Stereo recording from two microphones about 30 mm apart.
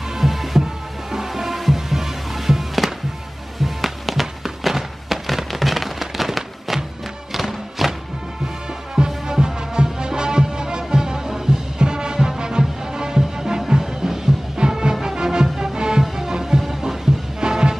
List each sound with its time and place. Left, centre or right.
0.2 s music: centre
7.8 s music: centre
8.9 s music: right